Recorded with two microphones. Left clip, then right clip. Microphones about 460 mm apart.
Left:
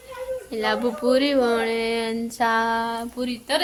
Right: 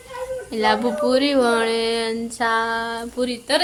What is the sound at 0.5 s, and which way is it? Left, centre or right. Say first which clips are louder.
Speech: right 5 dB; left.